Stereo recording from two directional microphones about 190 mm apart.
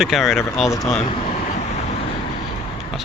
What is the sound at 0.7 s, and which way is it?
Speech, 20° left (ahead or behind).